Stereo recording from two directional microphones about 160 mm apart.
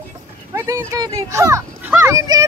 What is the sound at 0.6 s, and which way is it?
Speech, 20° right (ahead or behind).